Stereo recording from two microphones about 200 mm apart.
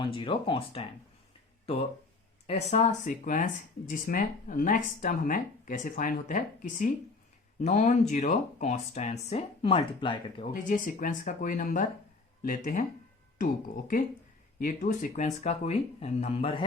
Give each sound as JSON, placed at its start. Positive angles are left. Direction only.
{"t": 0.0, "sound": "speech", "side_deg": 25}
{"t": 2.5, "sound": "speech", "side_deg": 35}
{"t": 10.5, "sound": "speech", "side_deg": 40}